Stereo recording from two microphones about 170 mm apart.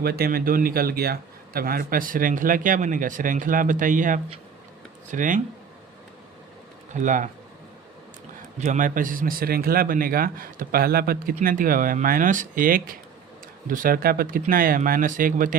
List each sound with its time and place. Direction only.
0.0 s a man's voice: 65° right (ahead or behind); by 5.4 s 50° right (ahead or behind)
6.9 s speech: 50° right (ahead or behind)
8.5 s a man's voice: 45° right (ahead or behind)